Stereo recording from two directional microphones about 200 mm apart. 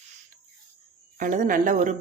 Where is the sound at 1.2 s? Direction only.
40° right (ahead or behind).